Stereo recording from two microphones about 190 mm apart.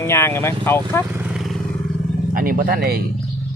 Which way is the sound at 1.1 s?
5° right (ahead or behind).